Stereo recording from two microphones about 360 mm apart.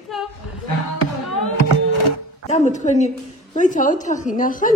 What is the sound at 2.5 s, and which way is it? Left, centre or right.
A woman's voice, centre.